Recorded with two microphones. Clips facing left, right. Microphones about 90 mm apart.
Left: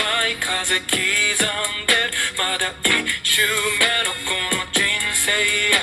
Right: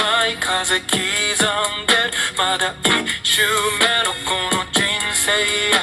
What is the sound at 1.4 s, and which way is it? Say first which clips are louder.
Music: right 5 dB; 45° right (ahead or behind).